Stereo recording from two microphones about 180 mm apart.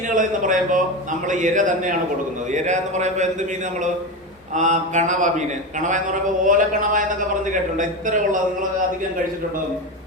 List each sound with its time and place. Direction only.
0.1 s a sound: 45° right (ahead or behind)
1.3 s speech: 45° right (ahead or behind)
4.5 s speech: 40° right (ahead or behind)
6.4 s speech: 45° right (ahead or behind)